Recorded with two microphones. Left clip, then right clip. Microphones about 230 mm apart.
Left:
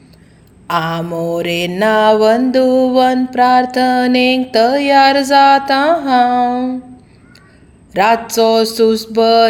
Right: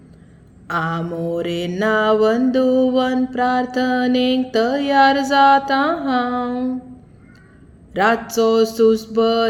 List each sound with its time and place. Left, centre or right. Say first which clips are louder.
0.7 s mantra: left 5 dB; centre
7.9 s mantra: left 5 dB; centre